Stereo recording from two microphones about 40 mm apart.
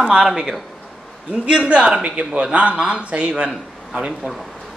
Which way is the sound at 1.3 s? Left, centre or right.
Right.